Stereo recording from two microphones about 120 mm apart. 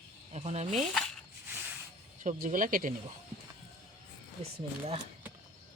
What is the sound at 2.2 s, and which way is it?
Speech, 90° right.